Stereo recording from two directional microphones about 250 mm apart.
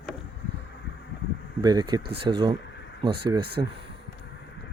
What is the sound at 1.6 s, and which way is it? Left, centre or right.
Speech, centre.